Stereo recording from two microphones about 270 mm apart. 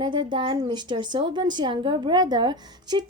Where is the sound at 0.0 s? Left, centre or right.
Centre.